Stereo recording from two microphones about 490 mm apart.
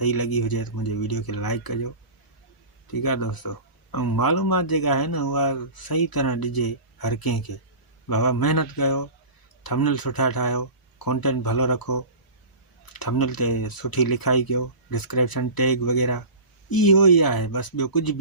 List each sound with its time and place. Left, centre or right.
0.0 s speech: left